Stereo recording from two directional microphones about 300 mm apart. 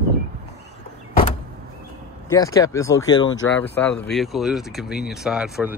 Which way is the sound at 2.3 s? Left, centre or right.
Centre.